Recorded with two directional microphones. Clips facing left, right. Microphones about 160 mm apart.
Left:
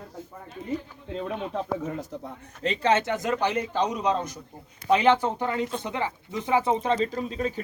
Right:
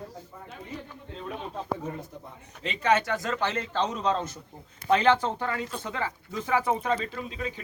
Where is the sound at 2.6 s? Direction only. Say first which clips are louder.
Left 2 dB; 30° left (ahead or behind).